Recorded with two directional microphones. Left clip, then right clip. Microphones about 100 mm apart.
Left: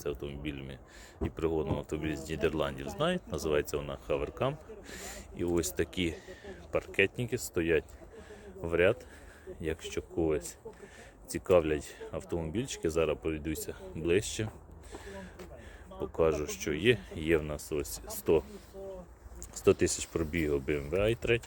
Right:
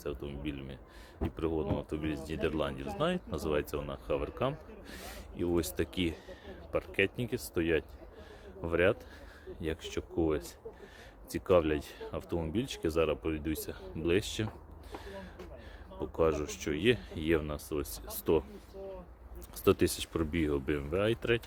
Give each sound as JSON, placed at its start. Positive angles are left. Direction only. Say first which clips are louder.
{"t": 0.0, "sound": "speech", "louder": "left 2 dB", "side_deg": -5}
{"t": 14.9, "sound": "a sound", "louder": "even", "side_deg": -15}
{"t": 16.0, "sound": "speech", "louder": "left 1 dB", "side_deg": -15}
{"t": 19.6, "sound": "speech", "louder": "left 1 dB", "side_deg": -25}